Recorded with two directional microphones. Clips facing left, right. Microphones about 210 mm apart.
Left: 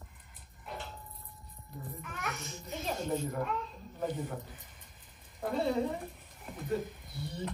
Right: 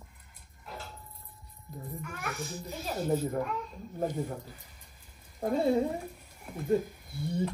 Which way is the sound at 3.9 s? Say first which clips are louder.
Right 3 dB; 45° right (ahead or behind).